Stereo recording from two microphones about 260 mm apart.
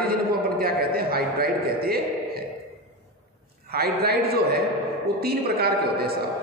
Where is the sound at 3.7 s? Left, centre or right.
Right.